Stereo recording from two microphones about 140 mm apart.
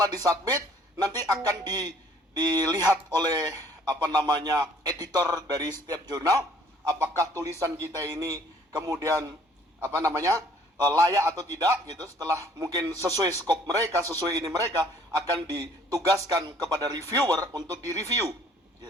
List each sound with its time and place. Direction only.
0.0 s a man's voice: 25° right (ahead or behind)